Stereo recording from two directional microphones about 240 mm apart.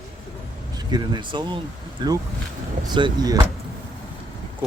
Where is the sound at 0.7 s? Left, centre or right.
Centre.